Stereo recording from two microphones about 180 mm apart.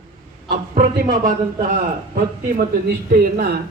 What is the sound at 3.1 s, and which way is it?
Speech, 55° right (ahead or behind).